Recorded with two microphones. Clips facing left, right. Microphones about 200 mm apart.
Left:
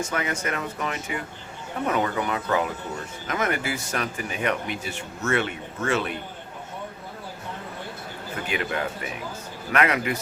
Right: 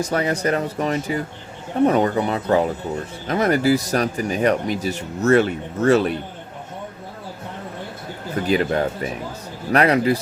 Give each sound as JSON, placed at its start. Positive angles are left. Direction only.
{"t": 0.0, "sound": "speech", "side_deg": -35}
{"t": 8.4, "sound": "speech", "side_deg": -35}